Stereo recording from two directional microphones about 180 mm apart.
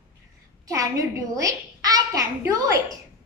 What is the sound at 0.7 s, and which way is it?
A child's voice, 20° right (ahead or behind).